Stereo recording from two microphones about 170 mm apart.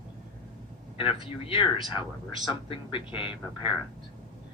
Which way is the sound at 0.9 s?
30° left (ahead or behind).